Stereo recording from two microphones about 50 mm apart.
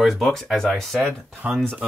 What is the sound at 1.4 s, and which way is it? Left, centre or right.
Speech, right.